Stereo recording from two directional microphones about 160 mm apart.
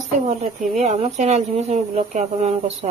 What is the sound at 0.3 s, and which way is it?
Speech, 50° right (ahead or behind).